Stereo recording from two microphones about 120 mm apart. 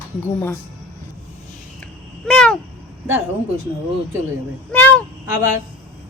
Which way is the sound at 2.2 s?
5° left (ahead or behind).